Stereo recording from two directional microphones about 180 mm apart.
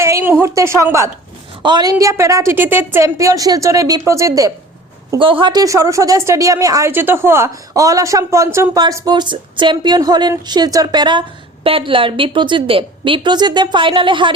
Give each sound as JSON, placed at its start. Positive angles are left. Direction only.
{"t": 0.0, "sound": "a woman's voice", "side_deg": -15}
{"t": 5.1, "sound": "a woman's voice", "side_deg": -30}